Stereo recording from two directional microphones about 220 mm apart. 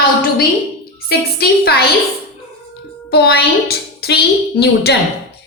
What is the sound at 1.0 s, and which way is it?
Speech, 45° left (ahead or behind).